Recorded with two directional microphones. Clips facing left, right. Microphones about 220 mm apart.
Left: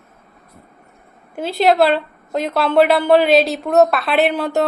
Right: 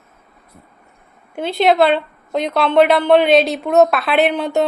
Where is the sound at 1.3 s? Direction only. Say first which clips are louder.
Even; 5° left (ahead or behind).